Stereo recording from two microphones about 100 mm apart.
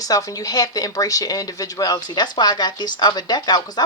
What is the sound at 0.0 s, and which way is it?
Speech, 35° left (ahead or behind).